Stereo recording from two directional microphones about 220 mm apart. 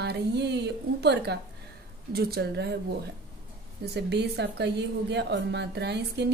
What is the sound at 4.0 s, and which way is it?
A woman's voice, 50° right (ahead or behind).